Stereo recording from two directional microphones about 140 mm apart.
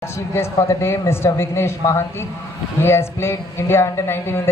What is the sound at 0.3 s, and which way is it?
A man's voice, 20° left (ahead or behind).